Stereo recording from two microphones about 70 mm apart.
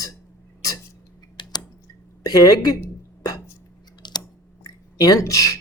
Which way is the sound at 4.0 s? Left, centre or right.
Left.